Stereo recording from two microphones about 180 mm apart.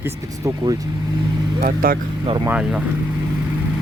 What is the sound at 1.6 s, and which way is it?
Speech, 55° right (ahead or behind).